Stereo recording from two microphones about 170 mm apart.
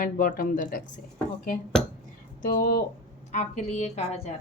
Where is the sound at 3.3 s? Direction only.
45° left (ahead or behind).